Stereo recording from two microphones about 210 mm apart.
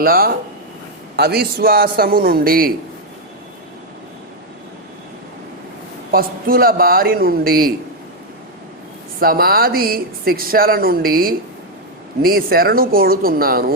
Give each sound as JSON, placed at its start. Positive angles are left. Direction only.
{"t": 0.0, "sound": "speech", "side_deg": -45}
{"t": 6.1, "sound": "speech", "side_deg": -45}
{"t": 9.2, "sound": "speech", "side_deg": -45}